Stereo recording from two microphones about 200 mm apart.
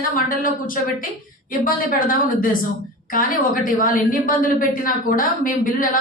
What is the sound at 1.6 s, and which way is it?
Speech, 45° left (ahead or behind).